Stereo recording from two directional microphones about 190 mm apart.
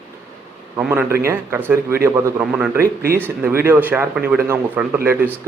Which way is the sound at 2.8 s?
50° right (ahead or behind).